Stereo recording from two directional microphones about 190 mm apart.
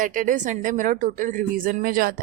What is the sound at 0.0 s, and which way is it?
A woman's voice, 45° right (ahead or behind).